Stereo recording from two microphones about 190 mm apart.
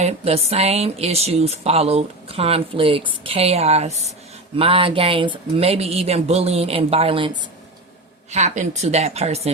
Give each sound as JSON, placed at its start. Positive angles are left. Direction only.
{"t": 0.0, "sound": "speech", "side_deg": -30}